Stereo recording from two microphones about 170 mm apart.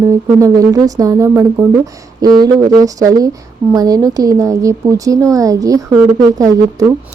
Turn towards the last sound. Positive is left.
turn(degrees=-20)  # may be behind; listen again after turning